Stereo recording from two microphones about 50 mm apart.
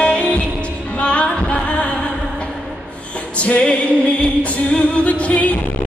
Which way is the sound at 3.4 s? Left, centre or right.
Left.